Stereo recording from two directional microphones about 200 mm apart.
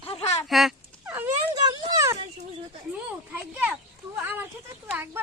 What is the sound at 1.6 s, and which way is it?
Speech, 20° right (ahead or behind).